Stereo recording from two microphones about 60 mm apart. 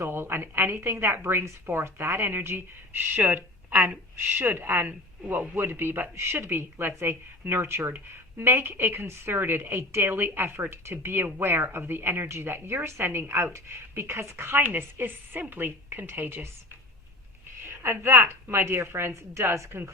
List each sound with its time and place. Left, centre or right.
0.0 s a woman's voice: right
5.5 s a woman's voice: right
17.6 s a woman's voice: right